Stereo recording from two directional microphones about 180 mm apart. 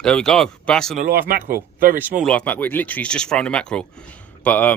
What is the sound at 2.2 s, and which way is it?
Speech, 5° left (ahead or behind).